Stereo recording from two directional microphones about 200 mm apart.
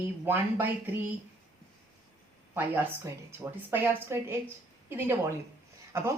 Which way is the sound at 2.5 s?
10° right (ahead or behind).